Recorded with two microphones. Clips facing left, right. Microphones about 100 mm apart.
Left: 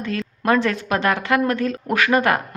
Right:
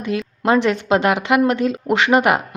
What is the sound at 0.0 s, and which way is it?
Speech, 20° right (ahead or behind).